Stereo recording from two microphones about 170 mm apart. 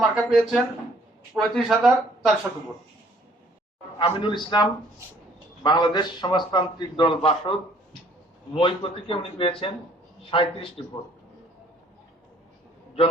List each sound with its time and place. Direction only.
0.0 s speech: 5° right (ahead or behind)
3.9 s a man's voice: 30° left (ahead or behind)
8.5 s speech: 30° left (ahead or behind)